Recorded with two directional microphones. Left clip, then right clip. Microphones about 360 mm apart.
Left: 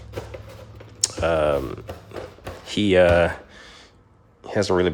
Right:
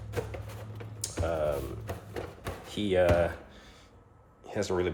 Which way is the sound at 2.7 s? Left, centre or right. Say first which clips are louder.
Left 9 dB; left.